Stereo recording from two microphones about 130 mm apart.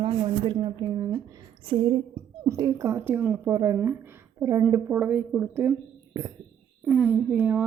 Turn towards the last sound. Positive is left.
turn(degrees=-15)  # may be behind; listen again after turning